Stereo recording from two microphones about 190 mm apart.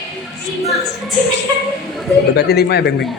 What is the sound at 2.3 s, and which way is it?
Speech, 60° left (ahead or behind).